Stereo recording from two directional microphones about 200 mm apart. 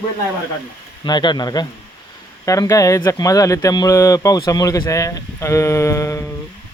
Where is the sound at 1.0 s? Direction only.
20° left (ahead or behind).